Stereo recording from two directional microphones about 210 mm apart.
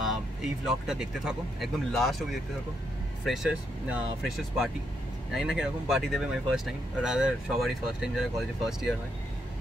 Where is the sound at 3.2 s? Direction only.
Centre (ahead or behind).